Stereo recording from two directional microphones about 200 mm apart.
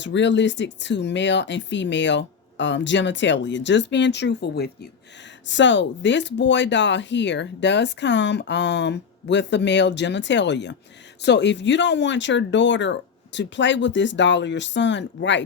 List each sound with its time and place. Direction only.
0.0 s speech: 65° left (ahead or behind)
5.5 s speech: 65° left (ahead or behind)